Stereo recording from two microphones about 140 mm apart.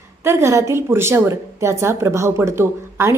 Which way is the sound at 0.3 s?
20° right (ahead or behind).